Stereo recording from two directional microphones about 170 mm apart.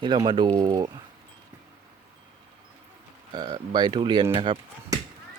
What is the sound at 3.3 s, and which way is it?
Speech, 25° right (ahead or behind).